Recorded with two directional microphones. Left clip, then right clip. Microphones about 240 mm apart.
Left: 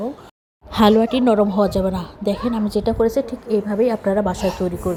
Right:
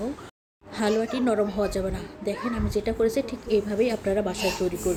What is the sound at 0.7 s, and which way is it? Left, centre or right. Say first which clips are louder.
A child's voice: left 10 dB; left.